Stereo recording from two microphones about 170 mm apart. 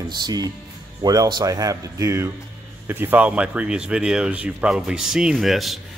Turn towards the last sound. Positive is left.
turn(degrees=0)  # may be behind; listen again after turning